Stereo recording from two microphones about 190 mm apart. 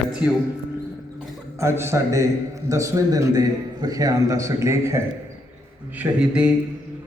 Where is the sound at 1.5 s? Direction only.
15° right (ahead or behind).